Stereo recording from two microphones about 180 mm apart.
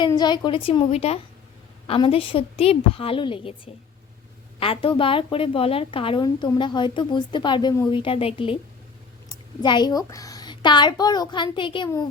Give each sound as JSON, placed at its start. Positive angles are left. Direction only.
{"t": 0.0, "sound": "a woman's voice", "side_deg": 25}
{"t": 4.6, "sound": "a woman's voice", "side_deg": 30}